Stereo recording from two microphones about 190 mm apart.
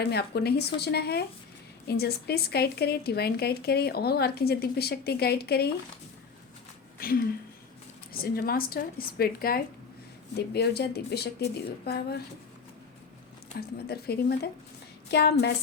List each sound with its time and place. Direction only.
0.0 s speech: 60° left (ahead or behind)
8.1 s a woman's voice: 50° left (ahead or behind)
13.6 s speech: 55° left (ahead or behind)